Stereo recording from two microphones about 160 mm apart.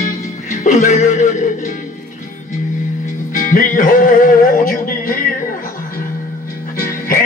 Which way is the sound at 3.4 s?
60° left (ahead or behind).